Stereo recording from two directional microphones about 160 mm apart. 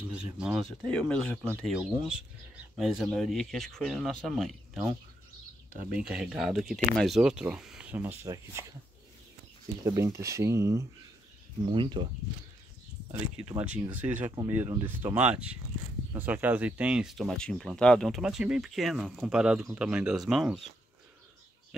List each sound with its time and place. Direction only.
0.1 s speech: 5° right (ahead or behind)
5.9 s speech: 5° right (ahead or behind)
9.8 s speech: 20° right (ahead or behind)
11.7 s speech: 30° right (ahead or behind)
13.1 s speech: 10° right (ahead or behind)